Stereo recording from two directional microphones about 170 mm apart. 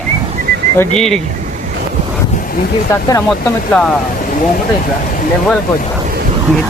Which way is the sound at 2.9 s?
15° left (ahead or behind).